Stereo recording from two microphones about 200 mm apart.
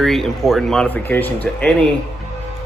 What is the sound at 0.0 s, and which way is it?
Speech, centre (ahead or behind).